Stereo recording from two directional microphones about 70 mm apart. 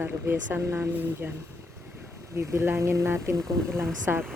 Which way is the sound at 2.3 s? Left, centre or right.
Right.